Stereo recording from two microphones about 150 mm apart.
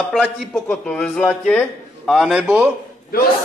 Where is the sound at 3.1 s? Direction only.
90° left.